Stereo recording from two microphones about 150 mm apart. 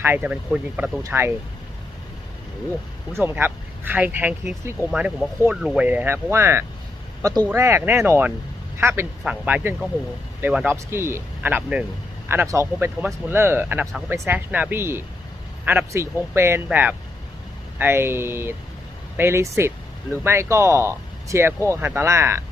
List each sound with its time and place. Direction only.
0.0 s speech: 10° right (ahead or behind)
3.1 s speech: 15° right (ahead or behind)
9.3 s speech: 5° right (ahead or behind)